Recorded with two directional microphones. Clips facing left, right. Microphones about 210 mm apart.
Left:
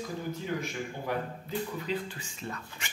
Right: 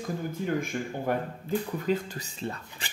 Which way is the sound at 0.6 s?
50° right (ahead or behind).